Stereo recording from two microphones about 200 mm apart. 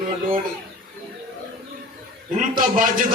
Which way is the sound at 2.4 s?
45° right (ahead or behind).